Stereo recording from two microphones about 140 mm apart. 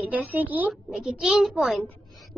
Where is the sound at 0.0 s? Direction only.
10° right (ahead or behind).